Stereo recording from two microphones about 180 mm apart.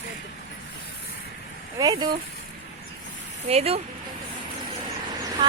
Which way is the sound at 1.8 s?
20° right (ahead or behind).